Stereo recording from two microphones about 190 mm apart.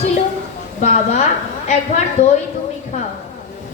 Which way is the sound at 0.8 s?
35° left (ahead or behind).